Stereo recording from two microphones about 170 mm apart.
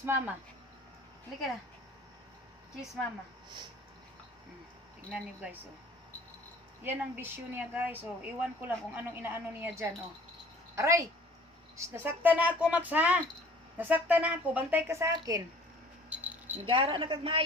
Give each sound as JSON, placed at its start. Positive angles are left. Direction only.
{"t": 0.0, "sound": "a woman's voice", "side_deg": -15}
{"t": 5.1, "sound": "a woman's voice", "side_deg": -10}
{"t": 6.8, "sound": "a woman's voice", "side_deg": -10}
{"t": 16.1, "sound": "keys jangling", "side_deg": -10}
{"t": 16.6, "sound": "a woman's voice", "side_deg": -30}